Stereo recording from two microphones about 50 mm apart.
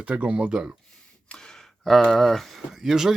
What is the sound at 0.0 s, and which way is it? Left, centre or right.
Speech, right.